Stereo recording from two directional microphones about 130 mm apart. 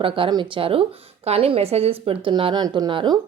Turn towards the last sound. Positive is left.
turn(degrees=-35)  # may be behind; listen again after turning